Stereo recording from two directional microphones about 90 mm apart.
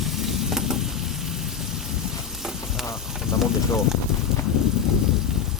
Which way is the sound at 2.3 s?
5° right (ahead or behind).